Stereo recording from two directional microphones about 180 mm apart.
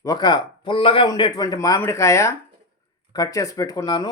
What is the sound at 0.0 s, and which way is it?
A man's voice, 20° left (ahead or behind).